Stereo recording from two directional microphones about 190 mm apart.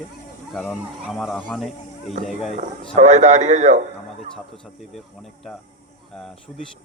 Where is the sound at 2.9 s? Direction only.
35° right (ahead or behind).